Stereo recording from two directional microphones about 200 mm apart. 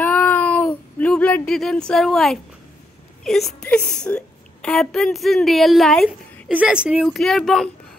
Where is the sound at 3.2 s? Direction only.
Centre (ahead or behind).